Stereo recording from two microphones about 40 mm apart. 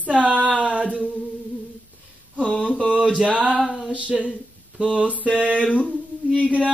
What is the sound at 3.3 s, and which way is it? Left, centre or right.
Speech, right.